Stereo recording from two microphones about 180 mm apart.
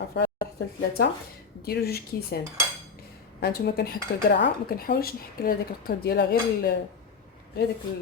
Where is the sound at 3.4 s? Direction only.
60° left (ahead or behind).